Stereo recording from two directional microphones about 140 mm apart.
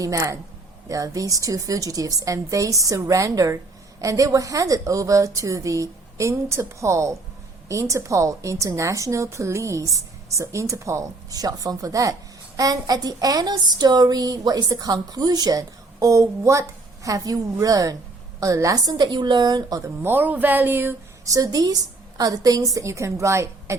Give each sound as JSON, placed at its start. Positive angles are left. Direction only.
{"t": 0.0, "sound": "speech", "side_deg": -25}
{"t": 20.0, "sound": "speech", "side_deg": -15}
{"t": 21.3, "sound": "speech", "side_deg": -25}